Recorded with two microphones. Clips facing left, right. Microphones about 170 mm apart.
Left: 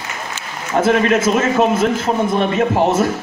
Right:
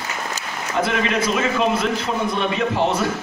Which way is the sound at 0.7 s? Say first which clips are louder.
Left 7 dB; 45° left (ahead or behind).